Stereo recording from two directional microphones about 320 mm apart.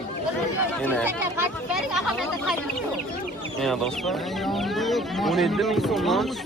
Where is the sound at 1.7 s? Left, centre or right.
Centre.